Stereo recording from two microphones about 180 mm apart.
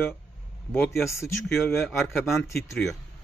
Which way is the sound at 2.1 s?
Centre (ahead or behind).